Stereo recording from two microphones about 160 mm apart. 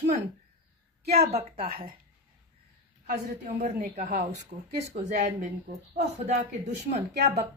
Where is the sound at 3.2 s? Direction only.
55° right (ahead or behind).